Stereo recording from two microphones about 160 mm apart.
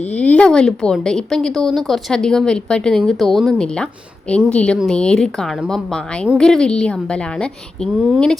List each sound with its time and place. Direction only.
0.2 s a woman's voice: 5° left (ahead or behind)